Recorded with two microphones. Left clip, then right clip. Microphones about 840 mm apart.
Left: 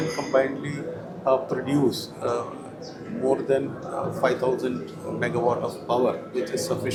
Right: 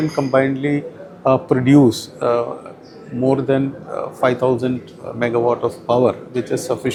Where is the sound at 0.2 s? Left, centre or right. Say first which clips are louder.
Right 7 dB; right.